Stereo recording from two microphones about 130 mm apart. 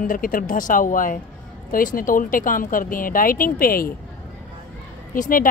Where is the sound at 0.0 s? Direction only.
90° left.